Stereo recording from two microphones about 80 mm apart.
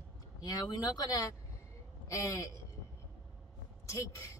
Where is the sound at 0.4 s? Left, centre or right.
Left.